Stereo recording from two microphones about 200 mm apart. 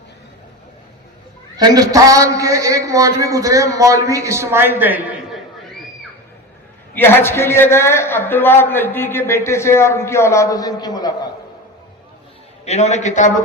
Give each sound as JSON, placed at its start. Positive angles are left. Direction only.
{"t": 1.5, "sound": "a man's voice", "side_deg": -20}
{"t": 6.9, "sound": "a man's voice", "side_deg": 10}
{"t": 12.6, "sound": "a man's voice", "side_deg": 35}